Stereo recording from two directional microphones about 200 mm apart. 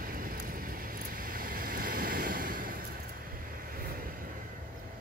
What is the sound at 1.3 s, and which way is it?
Vehicle, 45° right (ahead or behind).